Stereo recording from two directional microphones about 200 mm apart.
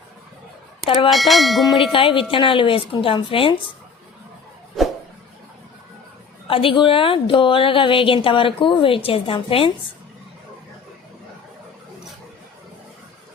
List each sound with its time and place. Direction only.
1.1 s church bell: centre (ahead or behind)
1.9 s a woman's voice: 25° left (ahead or behind)
4.8 s vehicle: centre (ahead or behind)
6.5 s a woman's voice: 25° left (ahead or behind)